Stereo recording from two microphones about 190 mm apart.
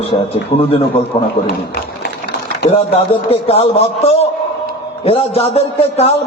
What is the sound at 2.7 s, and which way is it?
A man's voice, 30° left (ahead or behind).